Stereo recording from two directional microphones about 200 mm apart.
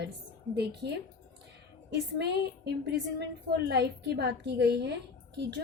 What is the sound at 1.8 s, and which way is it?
A woman's voice, 55° right (ahead or behind).